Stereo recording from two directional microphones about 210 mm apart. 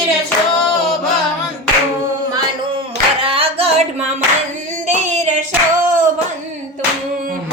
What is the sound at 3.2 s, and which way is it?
Singing, 25° right (ahead or behind).